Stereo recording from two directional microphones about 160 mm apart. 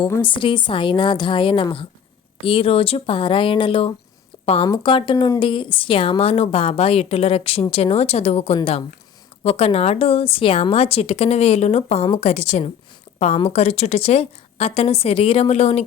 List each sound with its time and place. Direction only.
0.2 s speech: 30° left (ahead or behind)